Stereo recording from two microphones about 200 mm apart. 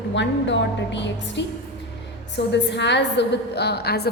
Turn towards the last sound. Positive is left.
turn(degrees=55)  # may be behind; listen again after turning